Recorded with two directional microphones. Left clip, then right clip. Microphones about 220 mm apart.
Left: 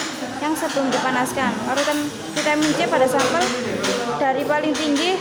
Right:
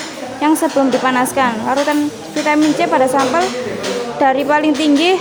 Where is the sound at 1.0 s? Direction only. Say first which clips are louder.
Right 7 dB; 35° right (ahead or behind).